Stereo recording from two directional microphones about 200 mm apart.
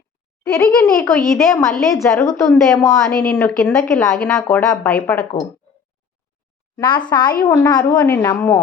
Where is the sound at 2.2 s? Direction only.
15° left (ahead or behind).